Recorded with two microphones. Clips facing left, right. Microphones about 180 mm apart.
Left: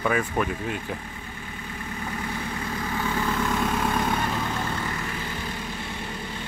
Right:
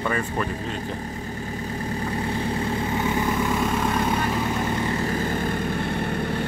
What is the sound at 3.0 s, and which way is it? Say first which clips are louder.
Vehicle: right 1 dB; 20° right (ahead or behind).